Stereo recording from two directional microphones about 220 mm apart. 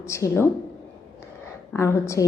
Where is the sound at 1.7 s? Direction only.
10° left (ahead or behind).